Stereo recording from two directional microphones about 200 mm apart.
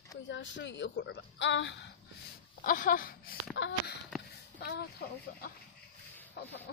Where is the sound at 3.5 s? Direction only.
65° left (ahead or behind).